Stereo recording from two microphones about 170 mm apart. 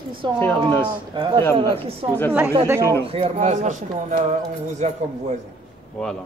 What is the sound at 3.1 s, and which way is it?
Speech, 40° right (ahead or behind).